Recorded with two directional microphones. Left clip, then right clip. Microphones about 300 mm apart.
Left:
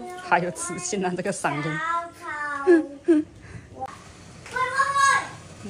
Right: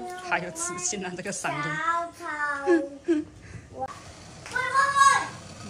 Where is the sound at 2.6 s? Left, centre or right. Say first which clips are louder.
Left 8 dB; centre.